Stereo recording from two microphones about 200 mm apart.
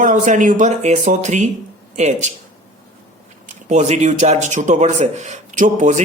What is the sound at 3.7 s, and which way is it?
Speech, 35° right (ahead or behind).